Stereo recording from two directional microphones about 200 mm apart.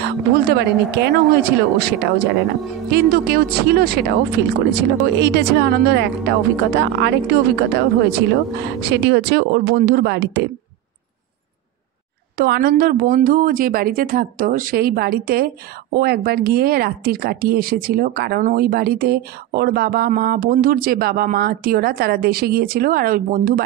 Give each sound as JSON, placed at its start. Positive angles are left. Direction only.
{"t": 0.0, "sound": "speech", "side_deg": -55}
{"t": 12.4, "sound": "speech", "side_deg": -50}